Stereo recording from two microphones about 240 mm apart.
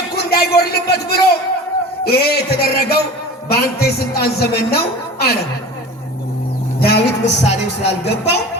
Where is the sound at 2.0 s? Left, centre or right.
Left.